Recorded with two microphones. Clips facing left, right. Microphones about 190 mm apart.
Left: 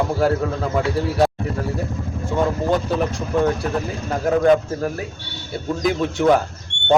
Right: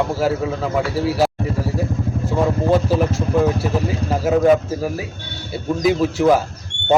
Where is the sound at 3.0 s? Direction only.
Centre (ahead or behind).